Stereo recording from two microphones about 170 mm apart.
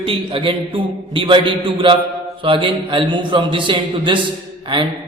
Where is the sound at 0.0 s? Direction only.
30° right (ahead or behind).